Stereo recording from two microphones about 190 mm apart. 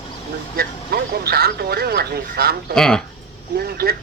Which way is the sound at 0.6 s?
55° right (ahead or behind).